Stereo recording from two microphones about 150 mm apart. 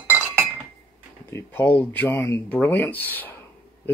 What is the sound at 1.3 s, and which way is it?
Speech, 10° left (ahead or behind).